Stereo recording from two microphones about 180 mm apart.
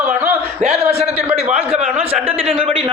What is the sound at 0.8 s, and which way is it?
A man's voice, 35° right (ahead or behind).